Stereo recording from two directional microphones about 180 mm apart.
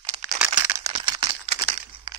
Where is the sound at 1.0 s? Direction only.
25° right (ahead or behind).